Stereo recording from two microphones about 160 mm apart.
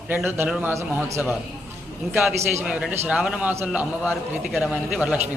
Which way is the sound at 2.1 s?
15° right (ahead or behind).